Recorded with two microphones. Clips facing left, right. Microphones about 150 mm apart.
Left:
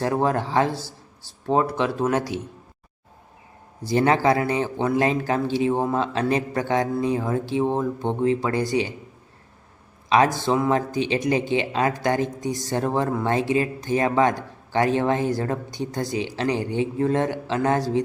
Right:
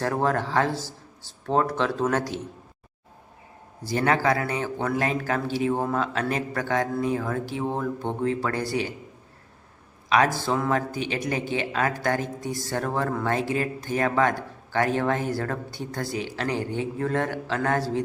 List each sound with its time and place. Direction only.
0.0 s speech: 15° left (ahead or behind)
3.8 s a man's voice: 25° left (ahead or behind)
10.1 s a man's voice: 20° left (ahead or behind)